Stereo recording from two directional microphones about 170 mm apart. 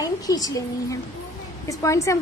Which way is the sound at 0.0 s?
20° left (ahead or behind).